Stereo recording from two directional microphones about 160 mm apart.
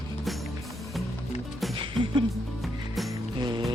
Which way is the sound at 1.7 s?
30° right (ahead or behind).